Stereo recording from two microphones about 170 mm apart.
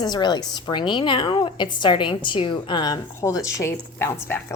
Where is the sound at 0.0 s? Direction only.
25° left (ahead or behind).